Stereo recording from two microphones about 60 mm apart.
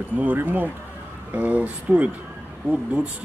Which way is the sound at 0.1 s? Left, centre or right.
Right.